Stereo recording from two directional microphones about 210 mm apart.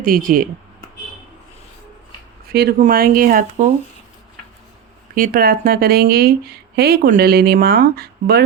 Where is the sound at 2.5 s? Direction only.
45° right (ahead or behind).